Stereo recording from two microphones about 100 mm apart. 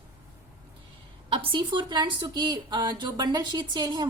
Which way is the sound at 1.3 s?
60° right (ahead or behind).